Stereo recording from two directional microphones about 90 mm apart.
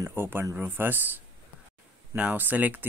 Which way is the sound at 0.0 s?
25° right (ahead or behind).